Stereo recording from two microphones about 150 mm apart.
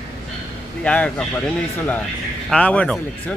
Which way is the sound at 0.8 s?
10° left (ahead or behind).